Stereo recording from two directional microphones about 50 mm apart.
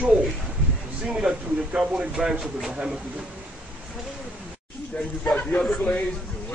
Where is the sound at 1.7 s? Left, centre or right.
Right.